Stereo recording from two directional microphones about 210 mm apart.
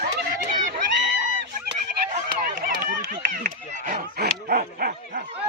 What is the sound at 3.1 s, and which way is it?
Dog, 40° right (ahead or behind).